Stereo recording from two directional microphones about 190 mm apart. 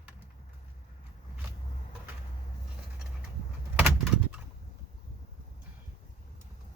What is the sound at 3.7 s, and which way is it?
Bird, centre (ahead or behind).